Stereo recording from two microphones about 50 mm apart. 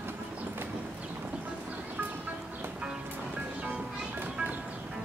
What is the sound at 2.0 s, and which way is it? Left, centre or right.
Music, right.